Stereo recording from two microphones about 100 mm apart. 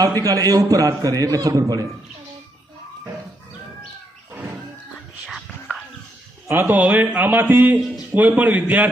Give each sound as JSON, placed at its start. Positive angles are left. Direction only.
{"t": 0.3, "sound": "a man's voice", "side_deg": -35}
{"t": 5.2, "sound": "whispering", "side_deg": 0}
{"t": 6.5, "sound": "a man's voice", "side_deg": -20}
{"t": 7.8, "sound": "speech", "side_deg": 0}
{"t": 8.1, "sound": "a man's voice", "side_deg": -15}